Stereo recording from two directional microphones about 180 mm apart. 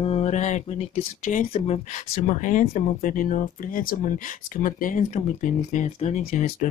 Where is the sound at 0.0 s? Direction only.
35° left (ahead or behind).